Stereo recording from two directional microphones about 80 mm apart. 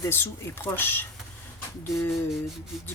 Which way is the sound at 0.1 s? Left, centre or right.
Left.